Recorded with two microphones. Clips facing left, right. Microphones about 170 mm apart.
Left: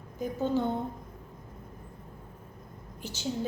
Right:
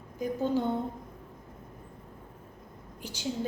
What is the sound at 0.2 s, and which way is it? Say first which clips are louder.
Speech: even; 10° right (ahead or behind).